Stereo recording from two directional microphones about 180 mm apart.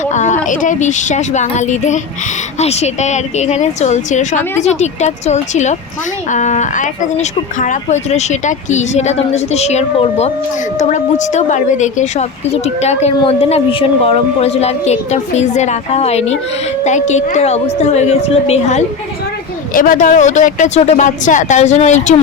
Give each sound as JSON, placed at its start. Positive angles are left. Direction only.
{"t": 0.0, "sound": "speech", "side_deg": 40}
{"t": 19.7, "sound": "speech", "side_deg": 50}